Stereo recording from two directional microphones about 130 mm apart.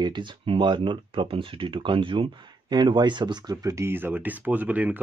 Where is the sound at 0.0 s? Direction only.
35° right (ahead or behind).